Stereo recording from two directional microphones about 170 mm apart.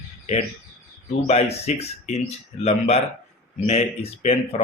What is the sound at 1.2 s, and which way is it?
Speech, 40° left (ahead or behind).